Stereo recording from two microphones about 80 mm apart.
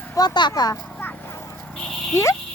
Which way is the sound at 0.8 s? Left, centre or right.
Left.